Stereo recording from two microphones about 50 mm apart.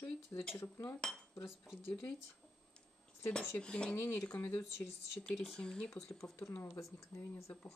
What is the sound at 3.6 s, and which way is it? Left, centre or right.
Speech, left.